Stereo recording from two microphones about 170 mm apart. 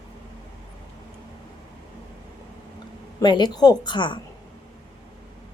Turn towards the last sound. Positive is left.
turn(degrees=30)  # may be behind; listen again after turning